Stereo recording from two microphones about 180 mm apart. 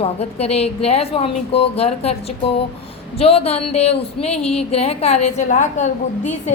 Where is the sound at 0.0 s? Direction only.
35° left (ahead or behind).